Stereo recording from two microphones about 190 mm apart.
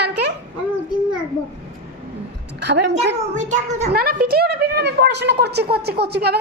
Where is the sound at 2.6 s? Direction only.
65° right (ahead or behind).